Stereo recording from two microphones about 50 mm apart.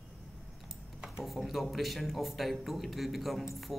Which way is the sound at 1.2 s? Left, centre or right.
Centre.